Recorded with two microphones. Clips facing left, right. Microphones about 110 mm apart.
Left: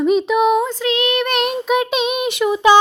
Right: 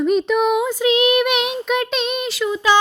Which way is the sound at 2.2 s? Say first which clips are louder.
Left 7 dB; 20° left (ahead or behind).